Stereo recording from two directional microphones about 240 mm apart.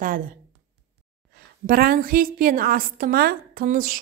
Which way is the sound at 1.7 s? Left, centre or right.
Right.